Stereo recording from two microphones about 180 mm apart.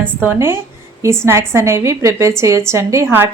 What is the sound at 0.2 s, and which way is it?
Speech, 10° right (ahead or behind).